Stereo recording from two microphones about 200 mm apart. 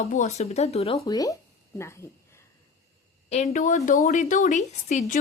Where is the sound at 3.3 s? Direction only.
35° left (ahead or behind).